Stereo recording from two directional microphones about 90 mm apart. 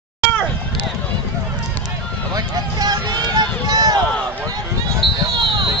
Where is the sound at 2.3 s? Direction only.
45° right (ahead or behind).